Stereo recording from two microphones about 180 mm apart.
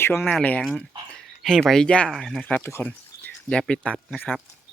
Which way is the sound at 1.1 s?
Centre (ahead or behind).